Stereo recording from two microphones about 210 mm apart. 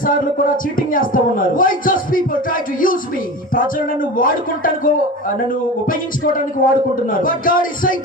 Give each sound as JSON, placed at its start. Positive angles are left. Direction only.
{"t": 0.0, "sound": "a man's voice", "side_deg": 40}
{"t": 4.2, "sound": "a man's voice", "side_deg": 40}